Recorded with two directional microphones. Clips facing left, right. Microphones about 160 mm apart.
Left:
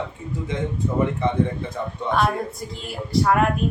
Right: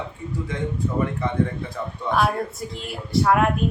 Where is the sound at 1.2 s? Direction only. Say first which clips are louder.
Left 3 dB; 25° left (ahead or behind).